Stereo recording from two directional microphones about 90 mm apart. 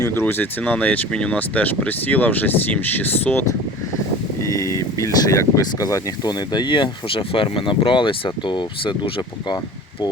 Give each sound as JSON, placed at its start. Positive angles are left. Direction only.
{"t": 0.1, "sound": "speech", "side_deg": 25}
{"t": 4.4, "sound": "speech", "side_deg": 35}